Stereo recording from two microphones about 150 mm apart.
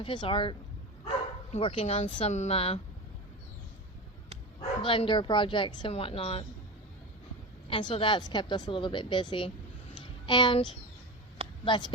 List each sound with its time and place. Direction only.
0.0 s a woman's voice: 35° left (ahead or behind)
1.5 s a woman's voice: 40° left (ahead or behind)
4.9 s a woman's voice: 35° left (ahead or behind)
7.7 s a woman's voice: 35° left (ahead or behind)
10.0 s a sound: 30° left (ahead or behind)
11.6 s a woman's voice: 30° left (ahead or behind)